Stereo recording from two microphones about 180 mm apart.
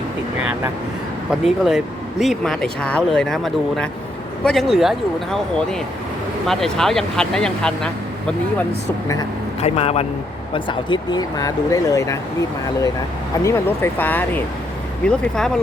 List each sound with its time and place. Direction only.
1.3 s speech: centre (ahead or behind)
9.6 s speech: 35° left (ahead or behind); by 12.2 s 20° left (ahead or behind)
13.4 s speech: 15° left (ahead or behind)